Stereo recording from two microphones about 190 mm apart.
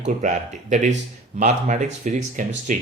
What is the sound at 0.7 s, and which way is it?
Speech, 40° right (ahead or behind).